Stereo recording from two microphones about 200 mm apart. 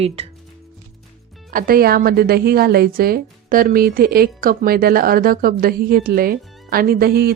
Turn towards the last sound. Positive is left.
turn(degrees=-50)  # may be behind; listen again after turning